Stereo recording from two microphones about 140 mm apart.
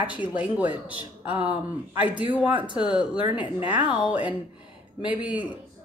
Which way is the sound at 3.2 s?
40° left (ahead or behind).